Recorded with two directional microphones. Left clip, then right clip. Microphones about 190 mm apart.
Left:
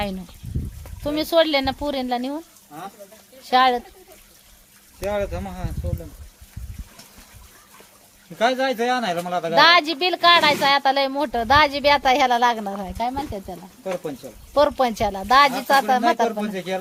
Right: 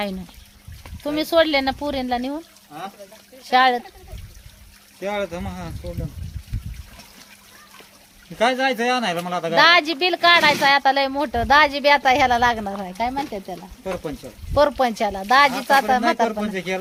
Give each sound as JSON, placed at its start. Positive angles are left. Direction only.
{"t": 1.0, "sound": "speech", "side_deg": 5}
{"t": 3.5, "sound": "speech", "side_deg": 10}
{"t": 4.9, "sound": "a man's voice", "side_deg": -25}
{"t": 8.4, "sound": "a man's voice", "side_deg": -30}
{"t": 9.6, "sound": "speech", "side_deg": 10}
{"t": 16.4, "sound": "a man's voice", "side_deg": -20}